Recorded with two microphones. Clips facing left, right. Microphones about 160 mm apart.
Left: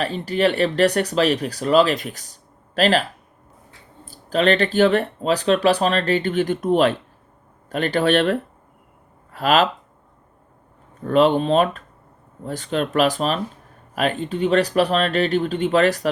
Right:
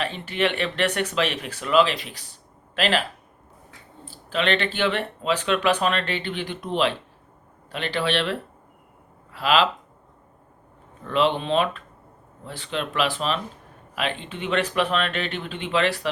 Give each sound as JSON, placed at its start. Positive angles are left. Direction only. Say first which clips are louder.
{"t": 0.0, "sound": "speech", "louder": "left 5 dB", "side_deg": 40}
{"t": 4.0, "sound": "speech", "louder": "left 6 dB", "side_deg": 40}
{"t": 11.0, "sound": "speech", "louder": "left 6 dB", "side_deg": 45}